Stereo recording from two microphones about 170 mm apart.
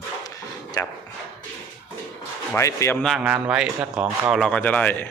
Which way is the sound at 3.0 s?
Centre (ahead or behind).